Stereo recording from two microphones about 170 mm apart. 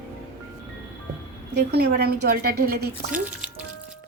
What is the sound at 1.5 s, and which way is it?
A woman's voice, 75° right (ahead or behind).